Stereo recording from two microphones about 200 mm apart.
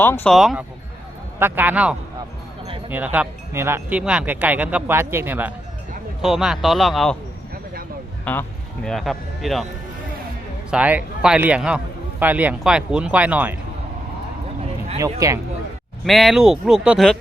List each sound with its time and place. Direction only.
0.0 s speech: 10° left (ahead or behind)
0.3 s speech: centre (ahead or behind)
8.2 s speech: 10° left (ahead or behind)
10.7 s speech: 5° right (ahead or behind)
15.2 s speech: 15° right (ahead or behind)
16.0 s speech: centre (ahead or behind)